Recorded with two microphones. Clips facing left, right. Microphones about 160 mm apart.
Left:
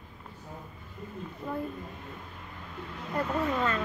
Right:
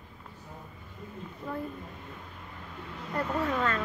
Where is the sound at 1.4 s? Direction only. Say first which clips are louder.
Left 1 dB; 15° left (ahead or behind).